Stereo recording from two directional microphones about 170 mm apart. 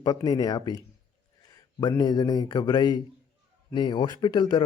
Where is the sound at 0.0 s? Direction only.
25° left (ahead or behind).